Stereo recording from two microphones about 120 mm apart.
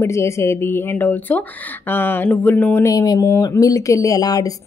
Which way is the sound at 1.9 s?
15° left (ahead or behind).